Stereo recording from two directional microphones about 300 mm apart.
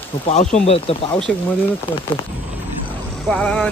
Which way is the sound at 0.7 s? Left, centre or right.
Centre.